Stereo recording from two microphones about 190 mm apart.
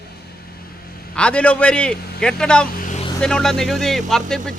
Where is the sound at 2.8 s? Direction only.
40° left (ahead or behind).